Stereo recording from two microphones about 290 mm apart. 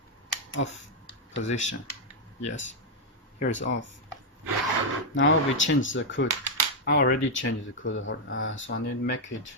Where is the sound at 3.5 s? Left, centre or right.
Left.